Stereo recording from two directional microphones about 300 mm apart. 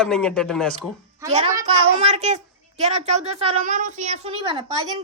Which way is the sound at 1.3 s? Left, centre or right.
Right.